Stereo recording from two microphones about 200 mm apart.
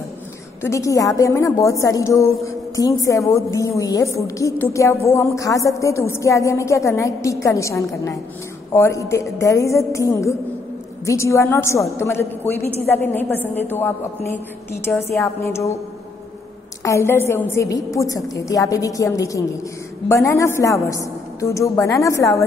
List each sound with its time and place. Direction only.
0.6 s a woman's voice: 15° left (ahead or behind)
16.8 s a woman's voice: 15° left (ahead or behind)